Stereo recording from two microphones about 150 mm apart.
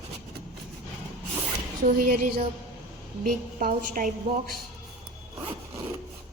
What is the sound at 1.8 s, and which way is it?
Female singing, 60° right (ahead or behind).